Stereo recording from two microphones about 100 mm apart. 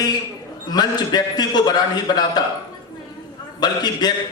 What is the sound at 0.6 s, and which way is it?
A man's voice, 45° left (ahead or behind).